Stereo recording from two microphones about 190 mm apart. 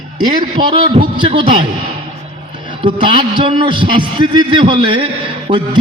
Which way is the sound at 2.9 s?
25° right (ahead or behind).